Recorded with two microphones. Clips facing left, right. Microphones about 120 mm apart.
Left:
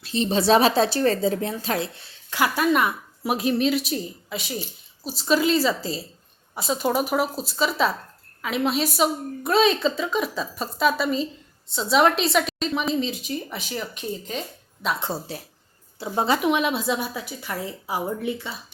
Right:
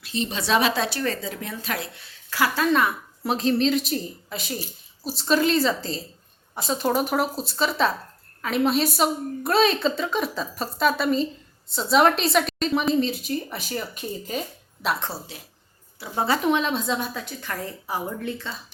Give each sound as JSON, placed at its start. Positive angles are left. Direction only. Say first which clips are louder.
{"t": 0.0, "sound": "a woman's voice", "louder": "left 6 dB", "side_deg": 30}
{"t": 16.0, "sound": "a woman's voice", "louder": "left 2 dB", "side_deg": 20}